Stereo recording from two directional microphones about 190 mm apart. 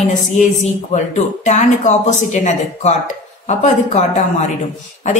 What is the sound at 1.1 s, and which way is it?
A woman's voice, 40° left (ahead or behind).